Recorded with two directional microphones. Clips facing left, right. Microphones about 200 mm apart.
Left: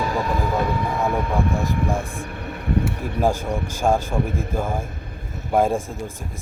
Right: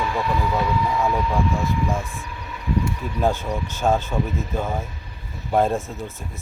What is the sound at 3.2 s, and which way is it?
Speech, 10° left (ahead or behind).